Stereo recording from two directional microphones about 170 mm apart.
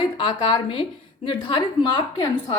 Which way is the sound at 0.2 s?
30° left (ahead or behind).